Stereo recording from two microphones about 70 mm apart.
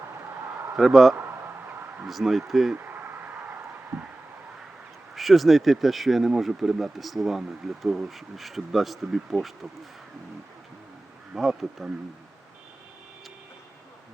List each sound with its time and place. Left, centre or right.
0.8 s speech: centre
2.7 s a sound: right
5.1 s speech: centre
11.3 s speech: centre